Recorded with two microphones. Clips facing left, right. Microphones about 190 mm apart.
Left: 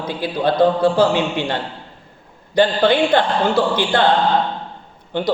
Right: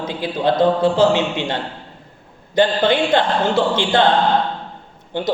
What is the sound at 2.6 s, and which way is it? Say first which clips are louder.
Speech: left 1 dB; 20° right (ahead or behind).